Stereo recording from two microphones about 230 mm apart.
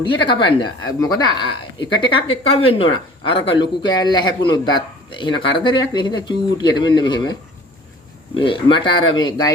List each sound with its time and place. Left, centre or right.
0.3 s a man's voice: left
8.4 s a man's voice: left